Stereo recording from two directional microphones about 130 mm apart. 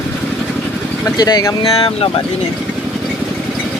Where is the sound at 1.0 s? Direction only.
30° left (ahead or behind).